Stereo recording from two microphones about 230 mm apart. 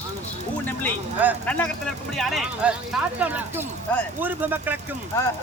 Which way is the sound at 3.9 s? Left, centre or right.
Centre.